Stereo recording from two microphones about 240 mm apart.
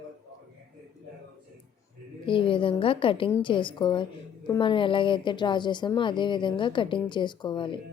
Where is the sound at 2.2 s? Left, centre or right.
Left.